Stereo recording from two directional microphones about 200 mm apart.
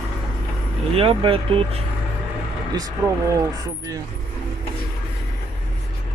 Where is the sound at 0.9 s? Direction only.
25° right (ahead or behind).